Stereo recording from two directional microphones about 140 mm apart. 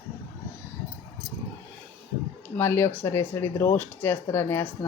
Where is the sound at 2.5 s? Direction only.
15° left (ahead or behind).